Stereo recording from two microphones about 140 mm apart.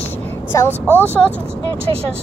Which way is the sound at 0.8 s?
15° right (ahead or behind).